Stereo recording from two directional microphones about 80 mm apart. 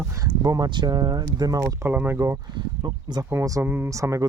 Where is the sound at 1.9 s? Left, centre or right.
Centre.